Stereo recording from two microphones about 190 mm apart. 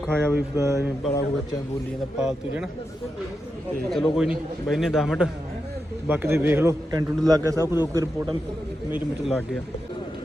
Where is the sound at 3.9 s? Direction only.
Centre (ahead or behind).